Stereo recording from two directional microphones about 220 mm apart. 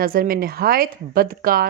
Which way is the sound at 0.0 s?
40° right (ahead or behind).